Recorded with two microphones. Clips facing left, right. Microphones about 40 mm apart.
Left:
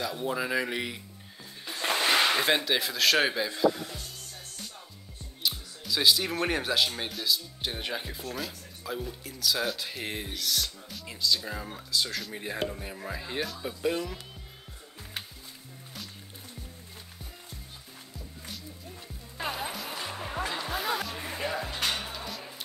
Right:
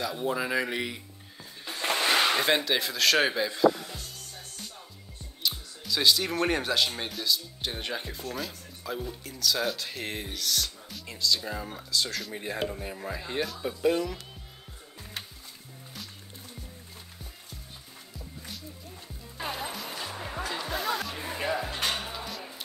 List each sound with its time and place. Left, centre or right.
0.0 s speech: centre
5.4 s speech: centre
19.3 s music: centre
20.2 s music: centre
21.6 s music: right
22.2 s music: centre